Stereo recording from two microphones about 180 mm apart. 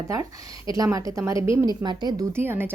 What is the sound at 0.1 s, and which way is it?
A woman's voice, 20° right (ahead or behind).